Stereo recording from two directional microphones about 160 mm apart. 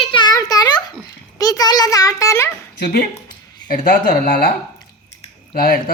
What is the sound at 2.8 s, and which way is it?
Speech, 90° left.